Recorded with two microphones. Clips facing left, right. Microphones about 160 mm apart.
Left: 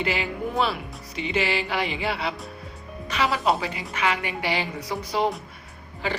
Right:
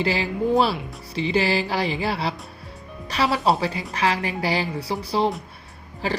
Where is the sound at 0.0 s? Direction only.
35° right (ahead or behind).